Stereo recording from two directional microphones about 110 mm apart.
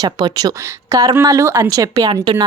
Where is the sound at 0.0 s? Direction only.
35° right (ahead or behind).